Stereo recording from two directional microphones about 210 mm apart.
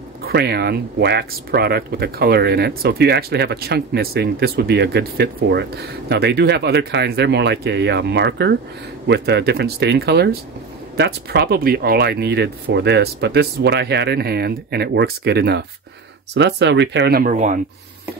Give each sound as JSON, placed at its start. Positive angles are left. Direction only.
{"t": 0.2, "sound": "speech", "side_deg": -50}